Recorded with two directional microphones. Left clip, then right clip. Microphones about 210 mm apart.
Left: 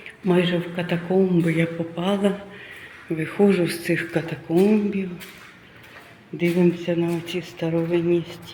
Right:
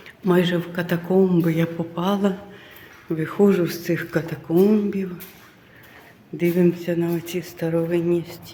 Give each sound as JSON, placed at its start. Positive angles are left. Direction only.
{"t": 0.3, "sound": "a man's voice", "side_deg": -15}
{"t": 6.3, "sound": "speech", "side_deg": -5}